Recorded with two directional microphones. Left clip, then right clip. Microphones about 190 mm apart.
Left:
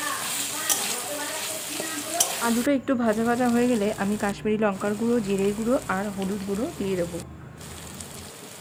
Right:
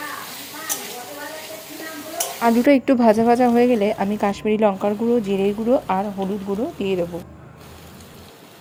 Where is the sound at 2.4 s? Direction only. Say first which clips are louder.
Right 12 dB; 25° right (ahead or behind).